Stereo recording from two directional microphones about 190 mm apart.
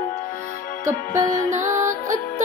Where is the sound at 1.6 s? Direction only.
40° right (ahead or behind).